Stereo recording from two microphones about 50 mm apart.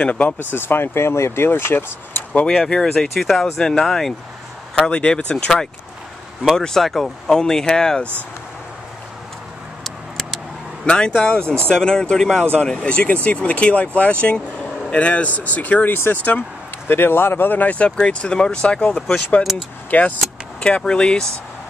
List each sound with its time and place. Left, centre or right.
0.0 s speech: left
0.4 s speech: left
2.4 s speech: centre
4.8 s speech: centre
9.8 s vehicle: centre
10.9 s speech: centre; by 16.0 s left
16.3 s vehicle: left
16.9 s speech: left
20.6 s speech: centre